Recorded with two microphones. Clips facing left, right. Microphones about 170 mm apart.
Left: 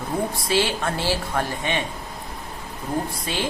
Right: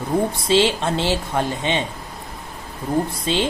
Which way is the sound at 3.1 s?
25° right (ahead or behind).